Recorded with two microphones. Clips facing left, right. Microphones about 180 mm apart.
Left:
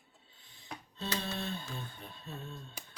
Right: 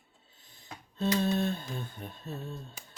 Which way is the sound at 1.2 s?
45° right (ahead or behind).